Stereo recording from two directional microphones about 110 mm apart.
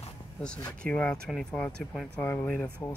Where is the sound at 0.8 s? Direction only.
10° left (ahead or behind).